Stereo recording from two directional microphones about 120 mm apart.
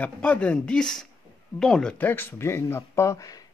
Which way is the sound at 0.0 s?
10° left (ahead or behind).